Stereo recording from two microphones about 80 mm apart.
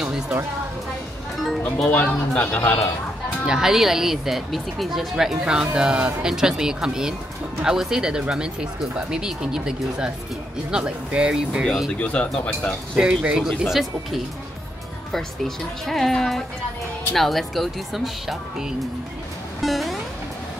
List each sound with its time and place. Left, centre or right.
0.0 s music: centre
1.6 s speech: centre
3.4 s speech: centre
12.0 s speech: centre
12.9 s speech: centre
19.6 s music: centre